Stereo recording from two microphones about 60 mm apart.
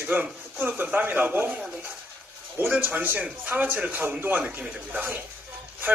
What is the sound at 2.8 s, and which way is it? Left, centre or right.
A man's voice, right.